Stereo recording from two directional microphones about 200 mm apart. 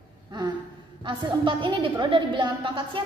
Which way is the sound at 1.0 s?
25° right (ahead or behind).